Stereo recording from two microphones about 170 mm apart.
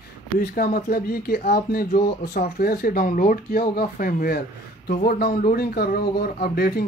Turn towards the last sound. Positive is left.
turn(degrees=70)  # may be behind; listen again after turning